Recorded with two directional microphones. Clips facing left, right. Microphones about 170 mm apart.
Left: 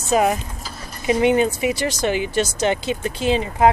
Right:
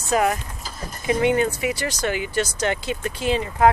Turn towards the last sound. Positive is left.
turn(degrees=20)  # may be behind; listen again after turning